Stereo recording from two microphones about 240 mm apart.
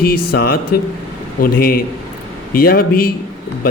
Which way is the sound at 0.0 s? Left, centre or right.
Left.